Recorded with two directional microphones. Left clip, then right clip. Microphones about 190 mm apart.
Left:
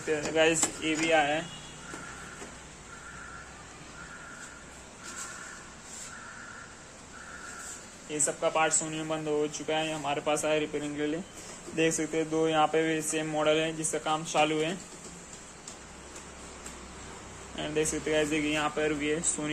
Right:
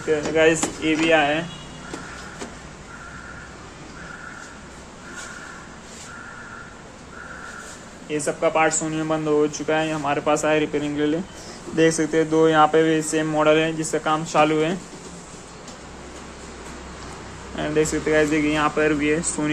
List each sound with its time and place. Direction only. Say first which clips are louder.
0.0 s speech: right 8 dB; 20° left (ahead or behind)
8.1 s speech: right 8 dB; 5° left (ahead or behind)
17.6 s speech: right 9 dB; 5° left (ahead or behind)